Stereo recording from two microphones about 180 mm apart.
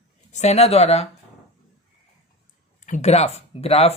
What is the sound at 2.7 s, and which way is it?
Speech, 45° left (ahead or behind).